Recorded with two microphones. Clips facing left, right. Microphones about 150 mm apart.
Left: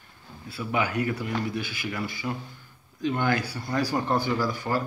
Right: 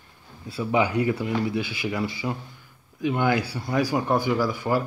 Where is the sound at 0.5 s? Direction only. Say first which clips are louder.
Right 5 dB; 25° right (ahead or behind).